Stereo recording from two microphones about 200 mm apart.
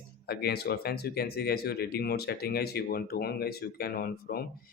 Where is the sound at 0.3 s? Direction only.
50° left (ahead or behind).